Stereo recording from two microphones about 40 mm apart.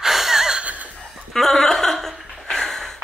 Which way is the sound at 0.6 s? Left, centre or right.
Right.